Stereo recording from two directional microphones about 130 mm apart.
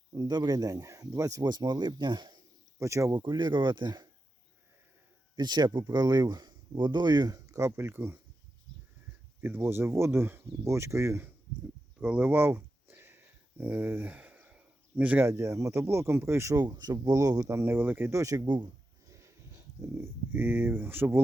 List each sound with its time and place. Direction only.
0.1 s speech: 35° right (ahead or behind)
3.2 s speech: 35° right (ahead or behind)
5.4 s speech: 35° right (ahead or behind); by 8.2 s 15° right (ahead or behind)
9.4 s speech: 15° right (ahead or behind)
11.9 s speech: 10° right (ahead or behind); by 17.6 s 30° right (ahead or behind)
17.6 s speech: 15° right (ahead or behind); by 18.6 s 30° right (ahead or behind)
19.0 s a sound: 25° right (ahead or behind)